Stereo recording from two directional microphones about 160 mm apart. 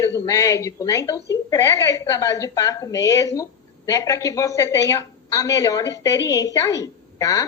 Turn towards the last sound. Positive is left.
turn(degrees=20)  # may be behind; listen again after turning